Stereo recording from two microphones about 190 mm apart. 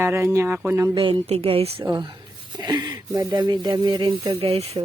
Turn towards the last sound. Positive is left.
turn(degrees=-25)  # may be behind; listen again after turning